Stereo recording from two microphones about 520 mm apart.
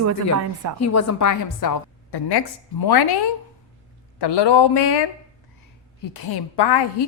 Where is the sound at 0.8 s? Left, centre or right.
Left.